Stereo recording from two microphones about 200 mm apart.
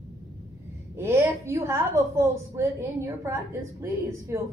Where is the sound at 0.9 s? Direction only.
10° right (ahead or behind).